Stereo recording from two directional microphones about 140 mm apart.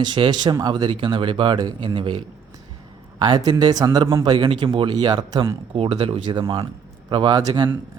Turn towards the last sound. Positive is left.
turn(degrees=-30)  # may be behind; listen again after turning